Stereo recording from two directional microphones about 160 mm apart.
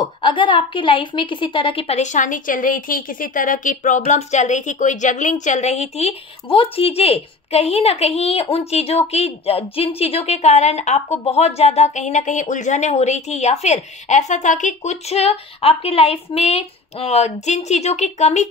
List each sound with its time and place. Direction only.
0.0 s a woman's voice: 30° left (ahead or behind); by 18.5 s 45° left (ahead or behind)